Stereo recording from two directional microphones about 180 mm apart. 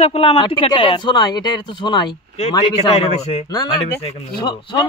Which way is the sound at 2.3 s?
35° left (ahead or behind).